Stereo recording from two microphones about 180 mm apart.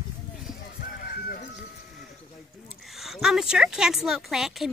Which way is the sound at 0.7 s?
55° left (ahead or behind).